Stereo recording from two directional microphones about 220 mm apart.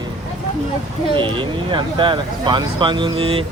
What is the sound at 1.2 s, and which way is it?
Speech, 20° right (ahead or behind).